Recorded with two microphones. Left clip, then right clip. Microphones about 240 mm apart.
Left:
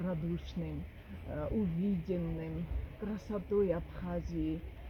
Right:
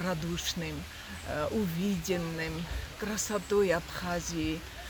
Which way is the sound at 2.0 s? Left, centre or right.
Right.